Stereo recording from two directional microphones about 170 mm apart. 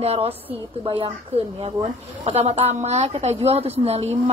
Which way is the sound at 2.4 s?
40° right (ahead or behind).